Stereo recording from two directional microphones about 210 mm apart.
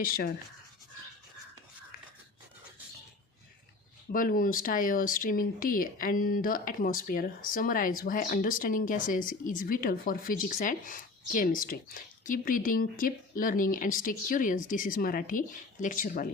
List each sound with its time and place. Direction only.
0.0 s speech: 45° left (ahead or behind)
4.1 s speech: 40° left (ahead or behind)